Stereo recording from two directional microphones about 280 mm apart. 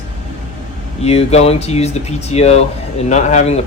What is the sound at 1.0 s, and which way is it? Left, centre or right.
A man's voice, left.